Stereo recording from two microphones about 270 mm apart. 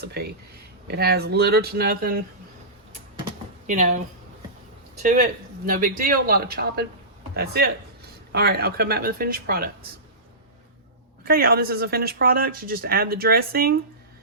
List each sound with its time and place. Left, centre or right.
0.0 s speech: right
3.7 s speech: right
5.0 s speech: right
11.3 s speech: right